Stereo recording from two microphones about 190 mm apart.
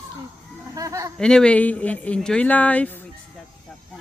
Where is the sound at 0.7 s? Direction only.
15° right (ahead or behind).